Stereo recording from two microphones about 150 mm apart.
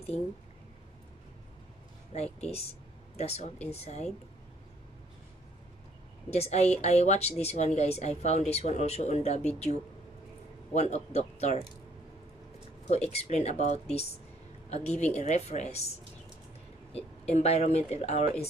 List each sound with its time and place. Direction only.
2.1 s a woman's voice: 45° left (ahead or behind)
6.3 s a woman's voice: 45° left (ahead or behind)
12.9 s a woman's voice: 45° left (ahead or behind)
14.7 s a woman's voice: 45° left (ahead or behind)
16.9 s a woman's voice: 40° left (ahead or behind)